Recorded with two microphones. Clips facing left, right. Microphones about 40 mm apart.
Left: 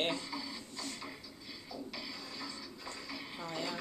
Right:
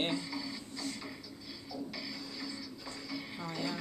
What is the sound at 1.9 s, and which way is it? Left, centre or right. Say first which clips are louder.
Music: right 2 dB; centre.